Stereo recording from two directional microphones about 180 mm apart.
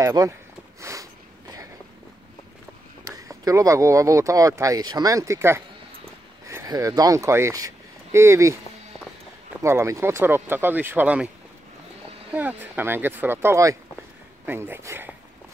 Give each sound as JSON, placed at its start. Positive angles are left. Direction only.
{"t": 0.0, "sound": "speech", "side_deg": -20}
{"t": 0.7, "sound": "a sound", "side_deg": -15}
{"t": 3.3, "sound": "speech", "side_deg": -20}
{"t": 9.6, "sound": "speech", "side_deg": -15}
{"t": 12.4, "sound": "speech", "side_deg": -10}